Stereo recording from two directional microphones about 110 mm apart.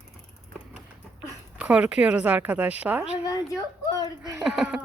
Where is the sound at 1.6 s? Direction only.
10° right (ahead or behind).